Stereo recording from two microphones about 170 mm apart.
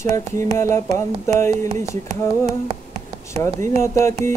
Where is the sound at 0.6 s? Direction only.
15° left (ahead or behind).